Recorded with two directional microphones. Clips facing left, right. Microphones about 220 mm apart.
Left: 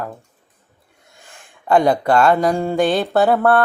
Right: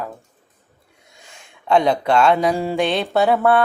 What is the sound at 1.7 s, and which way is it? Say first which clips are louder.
Mantra: left 2 dB; 5° left (ahead or behind).